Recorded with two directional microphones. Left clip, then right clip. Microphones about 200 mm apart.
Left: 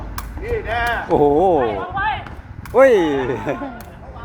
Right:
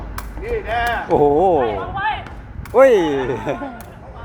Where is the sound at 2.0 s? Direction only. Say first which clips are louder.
Left 1 dB; 20° right (ahead or behind).